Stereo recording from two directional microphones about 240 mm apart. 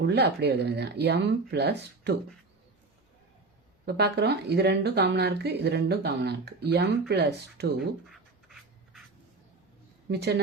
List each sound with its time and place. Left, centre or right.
0.0 s speech: right
3.8 s speech: right
10.1 s speech: right